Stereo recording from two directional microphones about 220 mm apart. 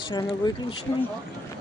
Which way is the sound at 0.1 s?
20° left (ahead or behind).